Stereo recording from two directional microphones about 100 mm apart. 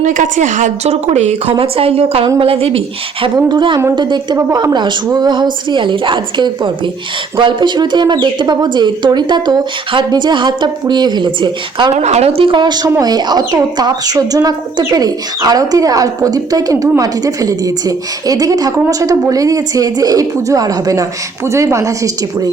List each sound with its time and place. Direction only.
0.9 s a woman's voice: 90° right; by 3.3 s 65° right (ahead or behind)
3.5 s speech: 50° right (ahead or behind)
12.1 s a woman's voice: 80° right
12.5 s speech: 45° right (ahead or behind)